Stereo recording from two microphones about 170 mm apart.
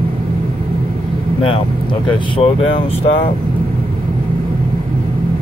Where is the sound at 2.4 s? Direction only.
35° left (ahead or behind).